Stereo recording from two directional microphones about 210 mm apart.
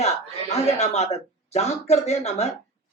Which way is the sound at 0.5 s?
30° left (ahead or behind).